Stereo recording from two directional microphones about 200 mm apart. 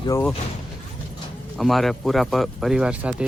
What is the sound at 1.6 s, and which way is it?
Speech, centre (ahead or behind).